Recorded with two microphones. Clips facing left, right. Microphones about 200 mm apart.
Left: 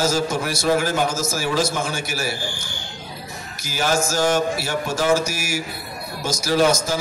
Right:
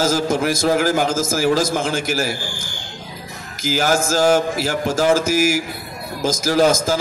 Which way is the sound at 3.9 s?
90° right.